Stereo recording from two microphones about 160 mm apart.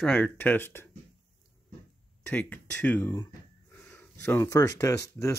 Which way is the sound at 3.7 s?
10° left (ahead or behind).